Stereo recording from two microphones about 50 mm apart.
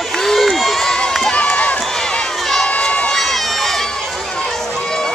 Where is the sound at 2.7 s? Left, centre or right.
Left.